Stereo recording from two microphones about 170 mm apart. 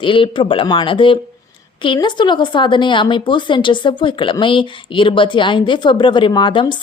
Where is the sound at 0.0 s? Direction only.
30° left (ahead or behind).